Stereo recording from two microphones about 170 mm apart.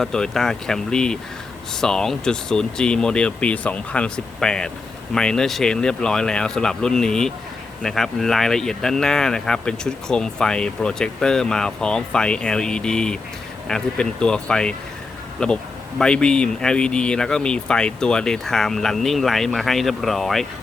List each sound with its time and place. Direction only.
0.0 s speech: 5° left (ahead or behind)